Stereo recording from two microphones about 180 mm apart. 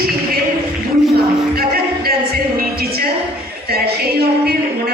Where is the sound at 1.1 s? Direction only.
60° right (ahead or behind).